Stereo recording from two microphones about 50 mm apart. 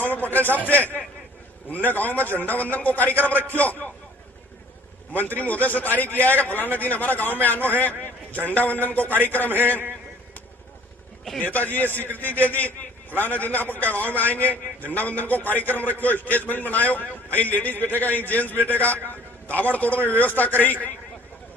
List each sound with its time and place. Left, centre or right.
0.0 s a man's voice: left
5.1 s a man's voice: left
7.8 s a sound: left
8.4 s a man's voice: left
11.3 s a man's voice: left